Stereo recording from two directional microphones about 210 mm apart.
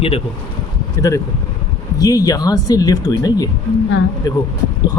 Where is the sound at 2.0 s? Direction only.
15° left (ahead or behind).